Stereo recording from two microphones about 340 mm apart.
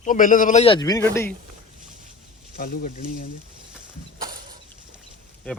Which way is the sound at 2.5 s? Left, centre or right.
Left.